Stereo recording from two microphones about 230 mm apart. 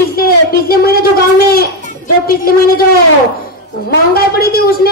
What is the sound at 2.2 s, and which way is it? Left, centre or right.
Speech, left.